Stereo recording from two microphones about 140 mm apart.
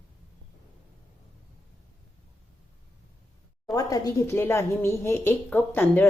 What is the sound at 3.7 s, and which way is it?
Speech, 25° left (ahead or behind).